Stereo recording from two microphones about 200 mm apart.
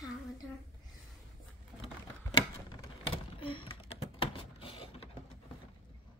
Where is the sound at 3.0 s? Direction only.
25° left (ahead or behind).